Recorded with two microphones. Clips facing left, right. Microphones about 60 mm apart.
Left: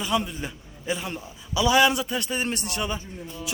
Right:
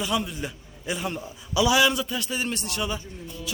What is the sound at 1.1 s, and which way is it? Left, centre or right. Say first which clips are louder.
Speech: right 2 dB; centre.